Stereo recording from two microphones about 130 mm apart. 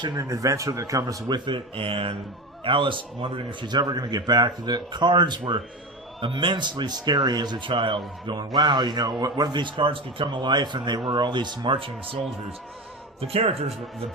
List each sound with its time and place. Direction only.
0.2 s speech: 25° right (ahead or behind)
1.5 s speech: 40° right (ahead or behind)
13.2 s speech: 50° right (ahead or behind)